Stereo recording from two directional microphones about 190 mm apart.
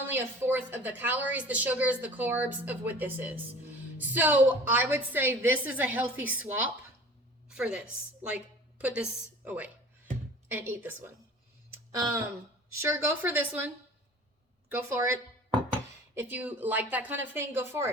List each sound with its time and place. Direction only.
0.1 s a woman's voice: 10° right (ahead or behind)
7.4 s a sound: 5° right (ahead or behind)
8.8 s a woman's voice: 5° right (ahead or behind)
11.7 s a sound: 15° right (ahead or behind)
12.7 s a woman's voice: 15° right (ahead or behind)
14.7 s a woman's voice: 15° right (ahead or behind)